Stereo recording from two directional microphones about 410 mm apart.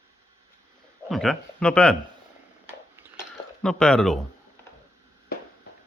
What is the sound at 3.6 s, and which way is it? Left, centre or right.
Speech, centre.